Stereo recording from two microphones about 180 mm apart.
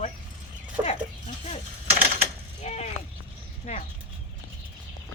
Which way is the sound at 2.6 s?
35° left (ahead or behind).